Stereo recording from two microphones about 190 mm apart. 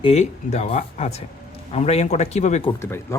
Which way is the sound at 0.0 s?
35° left (ahead or behind).